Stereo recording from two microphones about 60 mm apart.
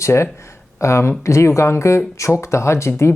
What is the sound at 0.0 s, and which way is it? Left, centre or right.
Speech, left.